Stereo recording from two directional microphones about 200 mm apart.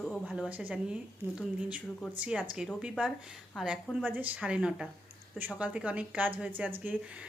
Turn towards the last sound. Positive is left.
turn(degrees=-10)  # may be behind; listen again after turning